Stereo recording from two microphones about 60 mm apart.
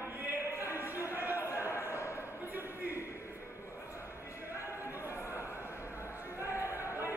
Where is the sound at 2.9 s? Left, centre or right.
Left.